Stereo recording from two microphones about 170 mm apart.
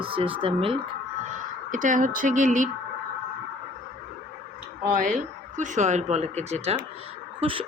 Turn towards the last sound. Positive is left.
turn(degrees=-30)  # may be behind; listen again after turning